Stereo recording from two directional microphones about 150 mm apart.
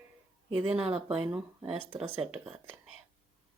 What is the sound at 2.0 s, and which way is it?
Speech, 40° right (ahead or behind).